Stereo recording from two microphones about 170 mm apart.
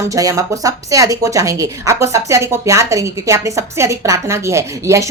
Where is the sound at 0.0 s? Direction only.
20° right (ahead or behind).